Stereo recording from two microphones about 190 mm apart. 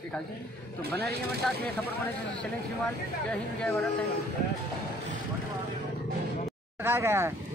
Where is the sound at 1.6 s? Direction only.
10° left (ahead or behind).